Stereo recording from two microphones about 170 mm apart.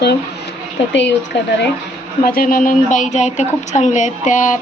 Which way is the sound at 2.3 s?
55° left (ahead or behind).